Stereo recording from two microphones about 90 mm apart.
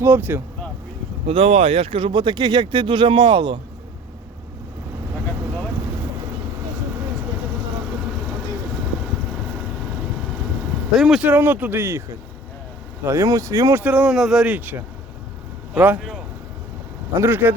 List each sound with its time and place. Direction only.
0.0 s a man's voice: 25° right (ahead or behind)
1.3 s speech: 90° right; by 3.6 s 75° right (ahead or behind)
10.9 s speech: 5° right (ahead or behind)
11.2 s a man's voice: 20° right (ahead or behind)
13.1 s speech: 35° right (ahead or behind)
13.7 s speech: 15° right (ahead or behind)
17.2 s a man's voice: 20° right (ahead or behind)